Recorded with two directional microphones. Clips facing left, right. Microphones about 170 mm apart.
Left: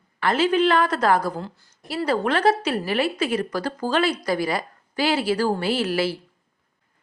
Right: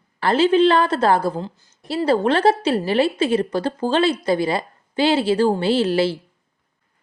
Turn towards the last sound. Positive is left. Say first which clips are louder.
# right 5 dB
turn(degrees=-25)  # may be behind; listen again after turning